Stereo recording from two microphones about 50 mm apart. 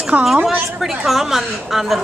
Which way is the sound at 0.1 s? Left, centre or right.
Right.